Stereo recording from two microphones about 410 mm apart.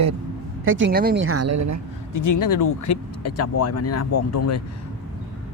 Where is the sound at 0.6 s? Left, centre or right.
Right.